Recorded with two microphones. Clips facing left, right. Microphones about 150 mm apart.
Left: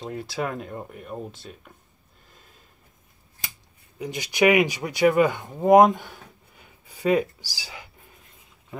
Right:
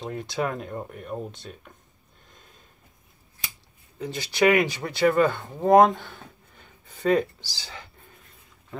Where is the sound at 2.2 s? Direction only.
5° left (ahead or behind).